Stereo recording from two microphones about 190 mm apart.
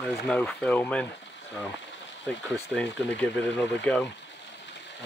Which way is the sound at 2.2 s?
5° left (ahead or behind).